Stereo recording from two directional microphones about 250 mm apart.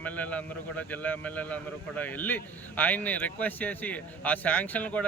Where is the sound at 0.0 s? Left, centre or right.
Centre.